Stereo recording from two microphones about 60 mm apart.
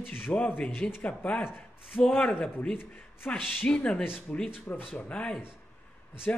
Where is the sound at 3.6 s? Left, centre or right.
Left.